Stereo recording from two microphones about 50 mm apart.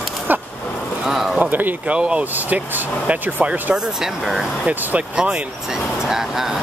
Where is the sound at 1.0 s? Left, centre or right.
Centre.